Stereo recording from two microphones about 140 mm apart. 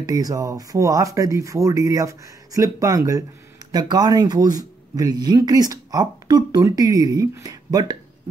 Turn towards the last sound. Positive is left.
turn(degrees=-30)  # may be behind; listen again after turning